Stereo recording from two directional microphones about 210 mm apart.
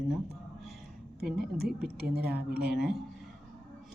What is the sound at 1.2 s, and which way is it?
Speech, centre (ahead or behind).